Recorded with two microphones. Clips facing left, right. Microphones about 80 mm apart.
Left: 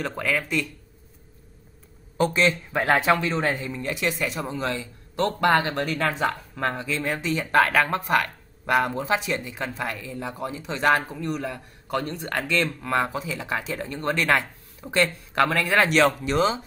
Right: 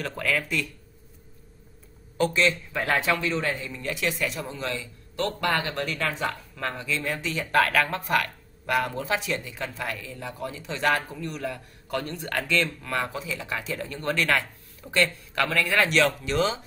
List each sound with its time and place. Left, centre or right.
0.0 s a man's voice: centre
2.1 s a man's voice: left
3.9 s speech: centre
4.4 s a man's voice: left